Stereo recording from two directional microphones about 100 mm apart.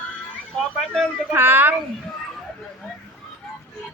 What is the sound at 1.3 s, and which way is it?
Speech, 20° right (ahead or behind).